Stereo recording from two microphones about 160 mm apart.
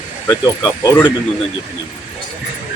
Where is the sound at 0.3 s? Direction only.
25° left (ahead or behind).